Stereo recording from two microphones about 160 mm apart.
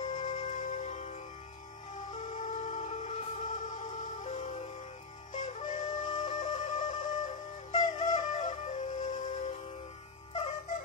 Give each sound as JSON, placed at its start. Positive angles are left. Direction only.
{"t": 0.0, "sound": "music", "side_deg": 50}
{"t": 7.9, "sound": "flute", "side_deg": 50}